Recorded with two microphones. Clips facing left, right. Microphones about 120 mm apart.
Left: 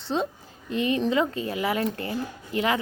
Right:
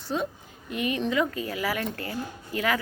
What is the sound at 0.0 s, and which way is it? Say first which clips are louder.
A child's voice: left 2 dB; 25° left (ahead or behind).